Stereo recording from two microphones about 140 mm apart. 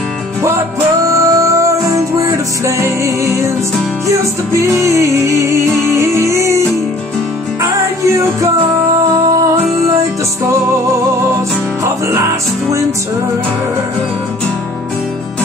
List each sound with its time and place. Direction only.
1.0 s music: 25° right (ahead or behind)
7.8 s music: 25° right (ahead or behind)
11.8 s music: 20° right (ahead or behind)